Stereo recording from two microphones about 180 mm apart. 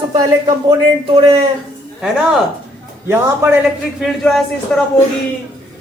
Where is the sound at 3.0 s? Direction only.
15° right (ahead or behind).